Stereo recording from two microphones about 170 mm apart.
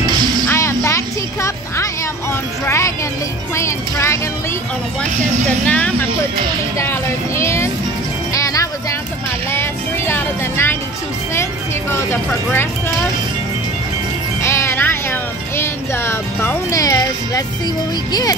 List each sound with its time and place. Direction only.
0.1 s music: 25° right (ahead or behind)
0.5 s music: 15° left (ahead or behind)
3.5 s speech: 15° left (ahead or behind)
5.7 s speech: 10° left (ahead or behind)
8.3 s music: 20° left (ahead or behind)
9.5 s speech: 15° left (ahead or behind)
11.9 s speech: 15° left (ahead or behind)
14.4 s speech: 15° left (ahead or behind)